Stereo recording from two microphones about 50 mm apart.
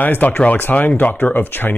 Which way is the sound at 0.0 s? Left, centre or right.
Left.